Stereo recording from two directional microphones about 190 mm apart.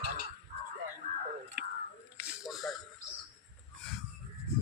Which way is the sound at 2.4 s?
Centre (ahead or behind).